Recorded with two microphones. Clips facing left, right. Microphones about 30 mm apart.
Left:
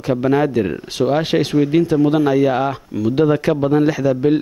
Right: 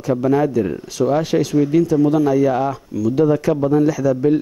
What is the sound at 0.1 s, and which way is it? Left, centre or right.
Speech, left.